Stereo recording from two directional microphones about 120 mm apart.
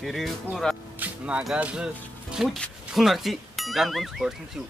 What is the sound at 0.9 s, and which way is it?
Speech, 10° right (ahead or behind).